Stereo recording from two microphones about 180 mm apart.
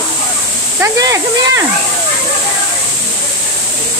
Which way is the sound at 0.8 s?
20° right (ahead or behind).